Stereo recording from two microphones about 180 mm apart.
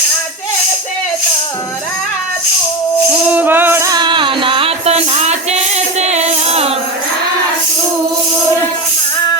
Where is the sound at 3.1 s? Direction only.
10° right (ahead or behind); by 6.7 s 35° right (ahead or behind).